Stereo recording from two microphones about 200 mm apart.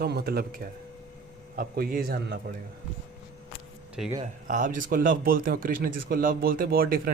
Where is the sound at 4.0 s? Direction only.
Centre (ahead or behind).